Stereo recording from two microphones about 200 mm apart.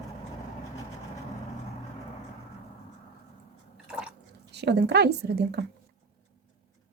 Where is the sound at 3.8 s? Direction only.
5° right (ahead or behind).